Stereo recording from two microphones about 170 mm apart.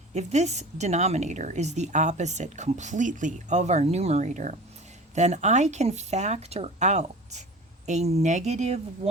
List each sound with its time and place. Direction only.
0.1 s a woman's voice: 40° right (ahead or behind)